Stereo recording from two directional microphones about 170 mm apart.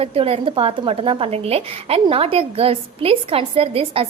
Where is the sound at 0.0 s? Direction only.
35° right (ahead or behind).